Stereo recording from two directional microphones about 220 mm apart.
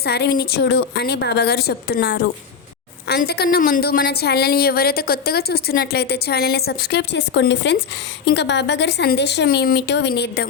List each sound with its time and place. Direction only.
0.0 s a woman's voice: 45° left (ahead or behind)